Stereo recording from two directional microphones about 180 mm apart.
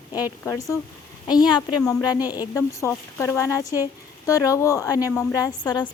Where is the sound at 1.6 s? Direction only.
20° left (ahead or behind).